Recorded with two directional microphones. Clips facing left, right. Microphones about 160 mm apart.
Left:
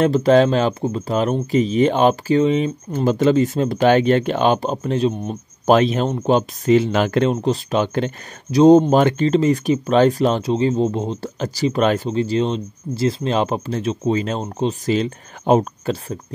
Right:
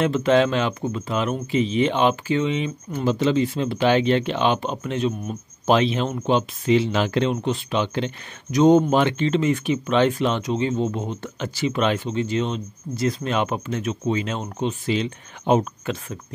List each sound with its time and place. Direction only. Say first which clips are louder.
0.0 s speech: left 4 dB; 35° left (ahead or behind)
5.7 s speech: left 4 dB; 45° left (ahead or behind)
8.5 s speech: left 5 dB; 35° left (ahead or behind)